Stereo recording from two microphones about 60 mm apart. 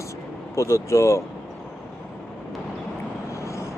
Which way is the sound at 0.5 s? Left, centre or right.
Left.